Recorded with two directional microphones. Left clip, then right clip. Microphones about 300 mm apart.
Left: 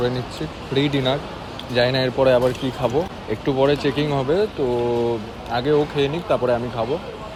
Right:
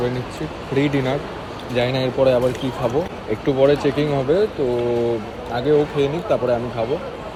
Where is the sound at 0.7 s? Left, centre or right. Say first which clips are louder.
Even; centre.